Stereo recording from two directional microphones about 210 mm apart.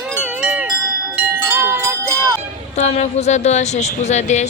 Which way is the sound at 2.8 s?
30° left (ahead or behind).